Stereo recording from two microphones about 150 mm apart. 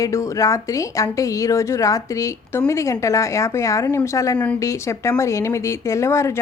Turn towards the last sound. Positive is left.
turn(degrees=20)  # may be behind; listen again after turning